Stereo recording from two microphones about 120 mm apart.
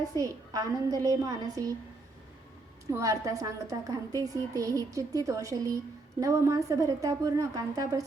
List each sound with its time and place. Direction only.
0.2 s a woman's voice: 30° right (ahead or behind)
2.9 s a woman's voice: 25° right (ahead or behind)